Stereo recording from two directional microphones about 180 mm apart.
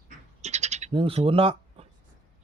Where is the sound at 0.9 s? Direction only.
30° right (ahead or behind).